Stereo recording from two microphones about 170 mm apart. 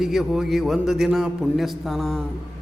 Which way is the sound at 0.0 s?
Centre (ahead or behind).